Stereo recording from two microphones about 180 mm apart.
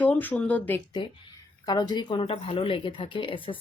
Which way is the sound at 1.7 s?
20° left (ahead or behind).